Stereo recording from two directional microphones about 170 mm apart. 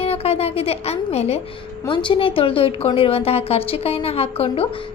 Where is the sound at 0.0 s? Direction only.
35° left (ahead or behind).